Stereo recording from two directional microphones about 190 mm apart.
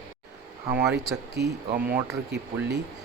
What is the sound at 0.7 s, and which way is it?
Speech, 60° right (ahead or behind).